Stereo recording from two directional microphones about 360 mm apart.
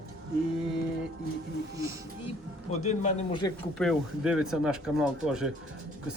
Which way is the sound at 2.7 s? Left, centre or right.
Centre.